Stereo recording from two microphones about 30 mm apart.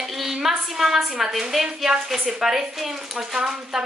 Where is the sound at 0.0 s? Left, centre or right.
Centre.